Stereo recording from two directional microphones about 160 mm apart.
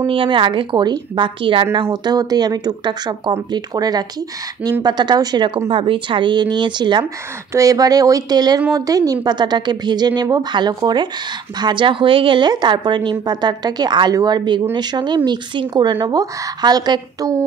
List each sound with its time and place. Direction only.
0.0 s a woman's voice: 30° right (ahead or behind)